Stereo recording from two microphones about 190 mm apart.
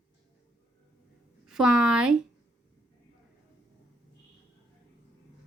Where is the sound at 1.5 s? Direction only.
5° right (ahead or behind).